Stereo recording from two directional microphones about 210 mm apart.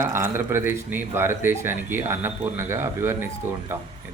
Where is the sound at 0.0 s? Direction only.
10° right (ahead or behind).